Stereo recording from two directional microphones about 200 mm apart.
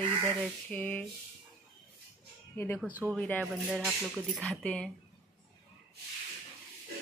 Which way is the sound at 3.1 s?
5° left (ahead or behind).